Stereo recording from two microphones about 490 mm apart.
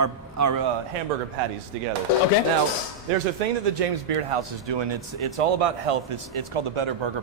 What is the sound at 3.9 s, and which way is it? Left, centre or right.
Speech, right.